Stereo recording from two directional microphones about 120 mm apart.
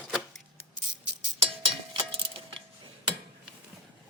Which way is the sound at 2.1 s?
50° right (ahead or behind).